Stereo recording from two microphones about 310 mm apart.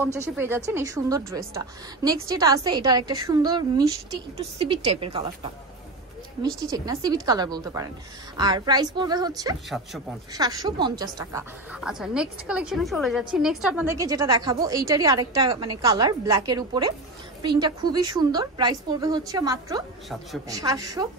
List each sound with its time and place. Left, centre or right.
0.0 s a woman's voice: centre
6.6 s a woman's voice: centre